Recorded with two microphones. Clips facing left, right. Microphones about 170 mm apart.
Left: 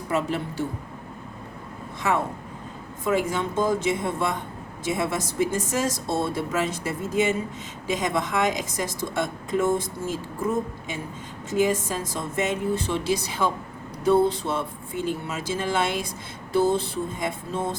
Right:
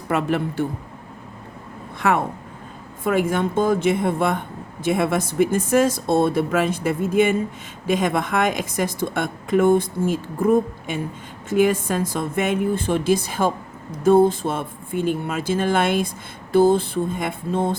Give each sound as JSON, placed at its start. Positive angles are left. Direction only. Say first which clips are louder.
{"t": 0.1, "sound": "speech", "louder": "right 5 dB", "side_deg": -55}
{"t": 2.0, "sound": "speech", "louder": "right 4 dB", "side_deg": -60}